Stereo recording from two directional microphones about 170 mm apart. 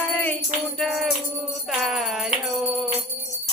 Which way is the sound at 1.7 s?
Centre (ahead or behind).